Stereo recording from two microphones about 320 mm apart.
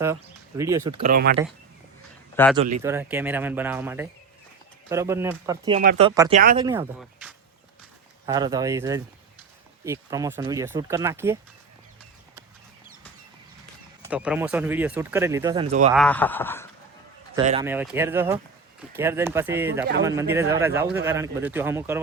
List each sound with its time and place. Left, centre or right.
0.0 s speech: centre
0.8 s speech: right
2.3 s speech: centre
2.6 s speech: right
2.8 s speech: centre
5.8 s speech: right
6.1 s speech: centre
7.0 s a sound: centre
8.3 s speech: centre
14.0 s speech: centre; by 15.9 s right
16.0 s speech: centre
17.3 s speech: centre